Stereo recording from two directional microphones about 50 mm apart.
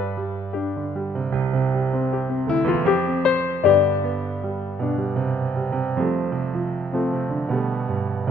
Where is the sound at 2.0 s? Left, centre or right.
Centre.